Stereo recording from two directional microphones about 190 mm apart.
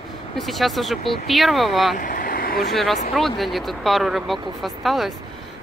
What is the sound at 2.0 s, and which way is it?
Vehicle, 45° left (ahead or behind).